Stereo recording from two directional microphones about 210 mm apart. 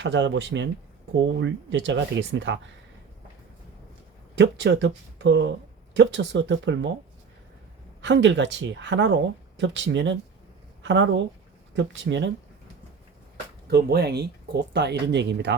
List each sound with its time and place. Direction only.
0.0 s speech: 60° right (ahead or behind)
4.4 s speech: 60° right (ahead or behind)
8.0 s speech: 60° right (ahead or behind)
13.3 s speech: 50° right (ahead or behind)